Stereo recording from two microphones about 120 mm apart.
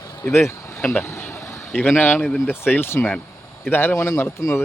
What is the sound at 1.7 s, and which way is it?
Speech, 15° left (ahead or behind).